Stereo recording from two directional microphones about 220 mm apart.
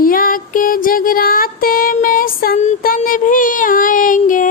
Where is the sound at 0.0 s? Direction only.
40° left (ahead or behind).